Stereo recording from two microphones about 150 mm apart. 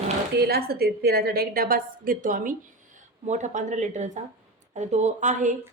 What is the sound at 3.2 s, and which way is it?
A woman's voice, 55° right (ahead or behind).